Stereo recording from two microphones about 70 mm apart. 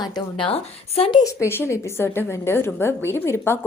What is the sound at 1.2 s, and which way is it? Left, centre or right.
A woman's voice, left.